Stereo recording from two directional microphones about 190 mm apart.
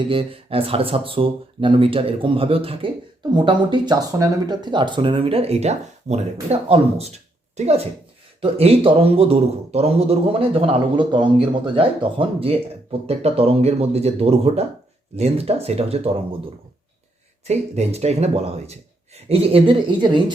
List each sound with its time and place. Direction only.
0.1 s a man's voice: 30° right (ahead or behind)
17.5 s a man's voice: 35° right (ahead or behind)